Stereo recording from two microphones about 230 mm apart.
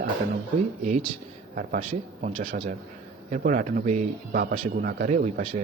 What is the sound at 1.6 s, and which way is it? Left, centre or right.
Speech, right.